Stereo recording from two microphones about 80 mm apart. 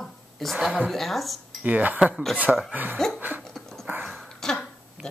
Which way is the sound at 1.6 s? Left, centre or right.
Centre.